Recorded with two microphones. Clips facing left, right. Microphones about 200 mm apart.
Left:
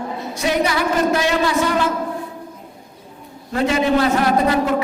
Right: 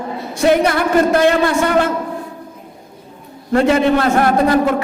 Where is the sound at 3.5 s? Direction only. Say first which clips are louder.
Right 4 dB; 55° right (ahead or behind).